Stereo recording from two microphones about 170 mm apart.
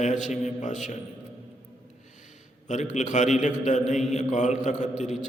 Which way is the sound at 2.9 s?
45° left (ahead or behind).